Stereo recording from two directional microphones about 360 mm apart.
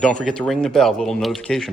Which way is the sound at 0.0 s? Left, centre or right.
Centre.